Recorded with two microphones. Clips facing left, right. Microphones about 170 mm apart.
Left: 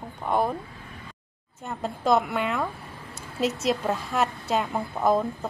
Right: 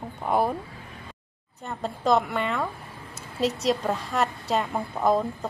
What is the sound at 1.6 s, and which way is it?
A woman's voice, centre (ahead or behind).